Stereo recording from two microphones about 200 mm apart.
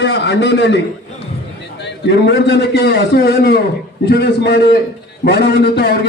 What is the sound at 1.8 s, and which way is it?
A man's voice, 60° left (ahead or behind).